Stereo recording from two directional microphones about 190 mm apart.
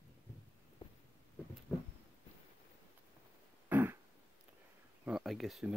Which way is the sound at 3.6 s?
10° right (ahead or behind).